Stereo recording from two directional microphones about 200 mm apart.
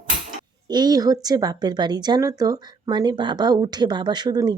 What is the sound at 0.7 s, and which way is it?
Speech, 20° right (ahead or behind).